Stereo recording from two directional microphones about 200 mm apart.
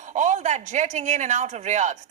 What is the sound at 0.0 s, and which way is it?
Speech, 35° right (ahead or behind).